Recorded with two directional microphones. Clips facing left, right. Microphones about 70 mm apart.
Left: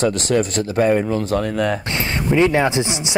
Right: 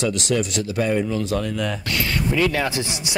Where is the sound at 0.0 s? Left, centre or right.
Left.